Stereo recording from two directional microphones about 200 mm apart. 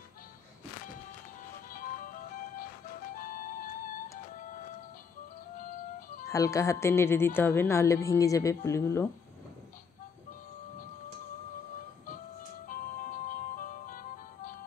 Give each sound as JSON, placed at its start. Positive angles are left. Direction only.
{"t": 1.7, "sound": "music", "side_deg": 45}
{"t": 3.2, "sound": "music", "side_deg": 45}
{"t": 5.6, "sound": "music", "side_deg": 45}
{"t": 6.2, "sound": "a woman's voice", "side_deg": 15}
{"t": 12.6, "sound": "music", "side_deg": 45}